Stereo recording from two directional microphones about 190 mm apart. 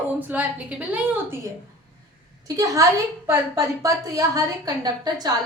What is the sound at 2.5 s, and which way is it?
A woman's voice, 20° right (ahead or behind).